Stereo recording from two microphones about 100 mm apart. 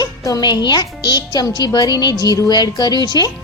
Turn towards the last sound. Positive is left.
turn(degrees=45)  # may be behind; listen again after turning